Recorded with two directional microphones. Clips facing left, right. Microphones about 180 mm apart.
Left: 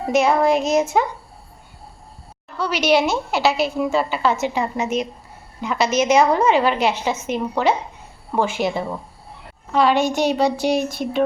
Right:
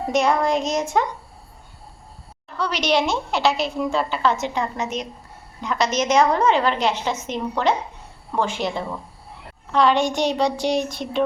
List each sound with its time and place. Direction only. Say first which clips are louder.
0.1 s a woman's voice: left 3 dB; 5° left (ahead or behind)
2.6 s a woman's voice: left 3 dB; 5° left (ahead or behind)